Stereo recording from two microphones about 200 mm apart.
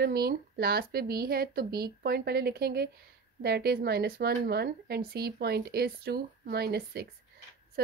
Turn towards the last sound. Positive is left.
turn(degrees=-50)  # may be behind; listen again after turning